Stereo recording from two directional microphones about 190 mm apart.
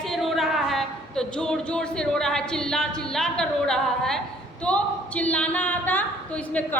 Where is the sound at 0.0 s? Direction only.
Centre (ahead or behind).